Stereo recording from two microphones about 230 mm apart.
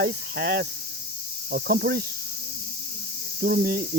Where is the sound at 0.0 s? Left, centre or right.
Right.